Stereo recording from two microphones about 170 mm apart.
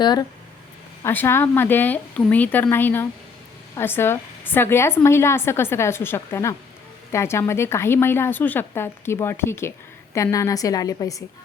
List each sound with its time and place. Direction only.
0.0 s a woman's voice: 25° left (ahead or behind)
1.0 s a woman's voice: 15° left (ahead or behind)